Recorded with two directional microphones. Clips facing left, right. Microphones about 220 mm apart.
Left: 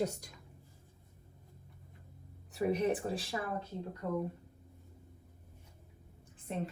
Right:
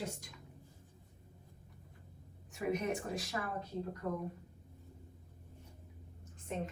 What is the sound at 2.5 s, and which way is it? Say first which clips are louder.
A woman's voice: left 4 dB; 35° left (ahead or behind).